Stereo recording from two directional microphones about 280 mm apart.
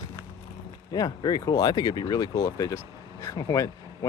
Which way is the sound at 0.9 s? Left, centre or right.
Centre.